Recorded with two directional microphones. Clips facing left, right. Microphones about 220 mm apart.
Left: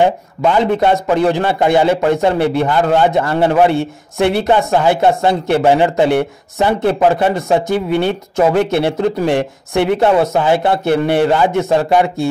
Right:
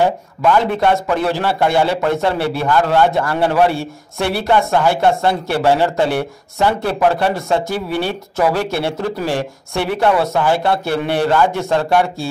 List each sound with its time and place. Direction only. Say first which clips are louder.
0.0 s speech: left 2 dB; 20° left (ahead or behind)